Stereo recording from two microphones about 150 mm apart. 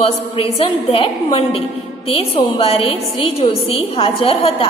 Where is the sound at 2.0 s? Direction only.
40° left (ahead or behind).